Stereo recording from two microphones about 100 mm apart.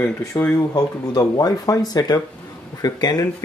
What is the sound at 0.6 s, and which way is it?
Speech, 40° left (ahead or behind).